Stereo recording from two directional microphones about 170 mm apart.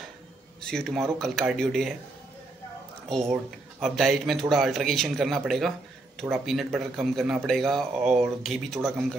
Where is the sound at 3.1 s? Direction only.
Centre (ahead or behind).